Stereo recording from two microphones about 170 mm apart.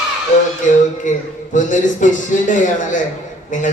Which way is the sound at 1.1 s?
50° left (ahead or behind).